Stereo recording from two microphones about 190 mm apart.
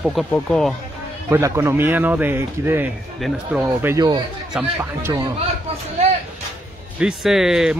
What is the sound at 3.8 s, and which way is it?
A man's voice, 20° right (ahead or behind).